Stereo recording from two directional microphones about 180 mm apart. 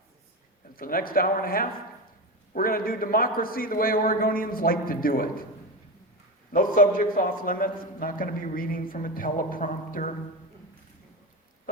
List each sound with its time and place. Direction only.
0.8 s a man's voice: 55° left (ahead or behind)
6.5 s a man's voice: 50° left (ahead or behind)